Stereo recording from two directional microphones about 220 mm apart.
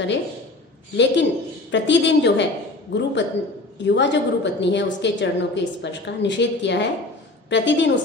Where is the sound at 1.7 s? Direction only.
55° left (ahead or behind).